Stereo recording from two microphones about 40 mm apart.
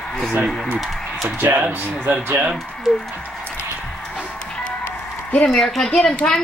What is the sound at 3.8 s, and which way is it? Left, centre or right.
Music, left.